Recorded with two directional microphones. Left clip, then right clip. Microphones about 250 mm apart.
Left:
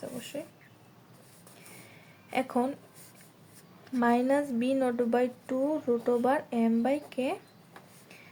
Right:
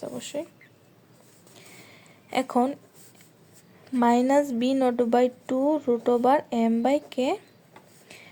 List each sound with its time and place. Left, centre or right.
0.2 s speech: right
2.3 s speech: right
3.9 s a woman's voice: right